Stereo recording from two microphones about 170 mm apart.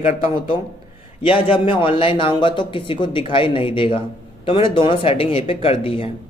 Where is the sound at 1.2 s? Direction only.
30° left (ahead or behind).